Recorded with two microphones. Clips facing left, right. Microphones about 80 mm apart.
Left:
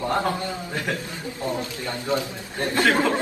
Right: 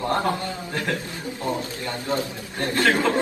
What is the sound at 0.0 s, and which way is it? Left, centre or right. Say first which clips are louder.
Speech: even; centre.